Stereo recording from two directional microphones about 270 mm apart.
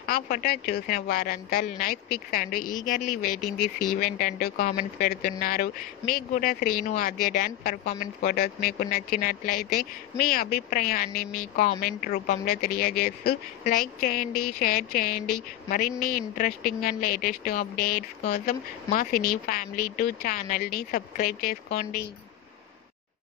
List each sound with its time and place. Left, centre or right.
0.0 s speech: left